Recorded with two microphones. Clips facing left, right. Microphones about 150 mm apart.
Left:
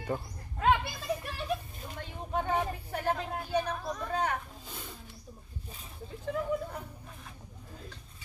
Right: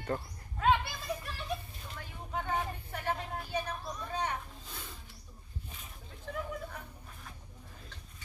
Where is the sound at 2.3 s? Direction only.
35° left (ahead or behind).